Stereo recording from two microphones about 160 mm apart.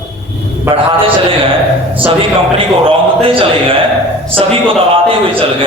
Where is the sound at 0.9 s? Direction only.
35° right (ahead or behind).